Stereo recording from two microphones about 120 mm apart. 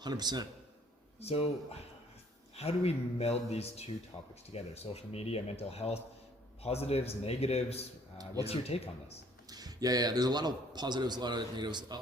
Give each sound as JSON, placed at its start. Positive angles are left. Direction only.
{"t": 0.0, "sound": "a man's voice", "side_deg": -35}
{"t": 1.2, "sound": "speech", "side_deg": 55}
{"t": 2.6, "sound": "speech", "side_deg": 55}
{"t": 9.5, "sound": "a man's voice", "side_deg": -30}